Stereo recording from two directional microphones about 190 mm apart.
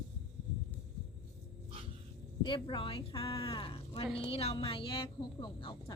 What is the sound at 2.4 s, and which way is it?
Speech, 25° left (ahead or behind).